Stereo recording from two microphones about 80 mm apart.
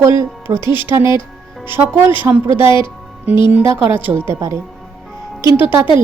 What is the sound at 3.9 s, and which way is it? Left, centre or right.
Speech, right.